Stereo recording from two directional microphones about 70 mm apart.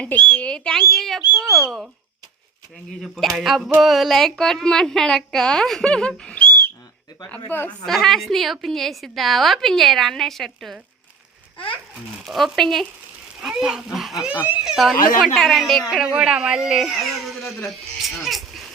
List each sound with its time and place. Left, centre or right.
0.0 s a woman's voice: centre
3.0 s a woman's voice: centre
7.3 s a woman's voice: left
7.9 s a woman's voice: centre
12.2 s a woman's voice: centre
13.4 s speech: centre
14.3 s speech: right
14.6 s a woman's voice: centre
15.9 s a woman's voice: centre